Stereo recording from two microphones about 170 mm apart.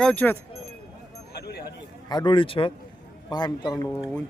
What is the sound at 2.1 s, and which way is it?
Speech, 25° left (ahead or behind).